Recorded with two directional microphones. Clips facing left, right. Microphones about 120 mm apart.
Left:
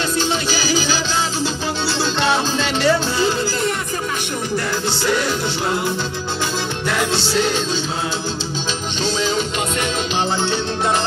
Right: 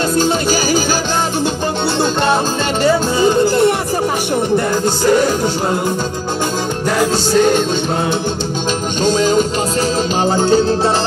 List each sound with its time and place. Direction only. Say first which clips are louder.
0.1 s music: right 6 dB; 45° right (ahead or behind)
3.2 s music: right 8 dB; 50° right (ahead or behind)
5.0 s music: right 8 dB; 40° right (ahead or behind)
7.0 s music: right 7 dB; 50° right (ahead or behind)
9.0 s music: right 8 dB; 45° right (ahead or behind)